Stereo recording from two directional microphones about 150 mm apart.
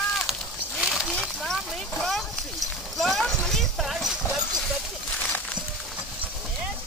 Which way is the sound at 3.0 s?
Centre (ahead or behind).